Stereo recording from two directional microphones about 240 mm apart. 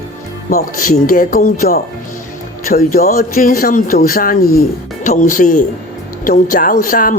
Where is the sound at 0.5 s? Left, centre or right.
Left.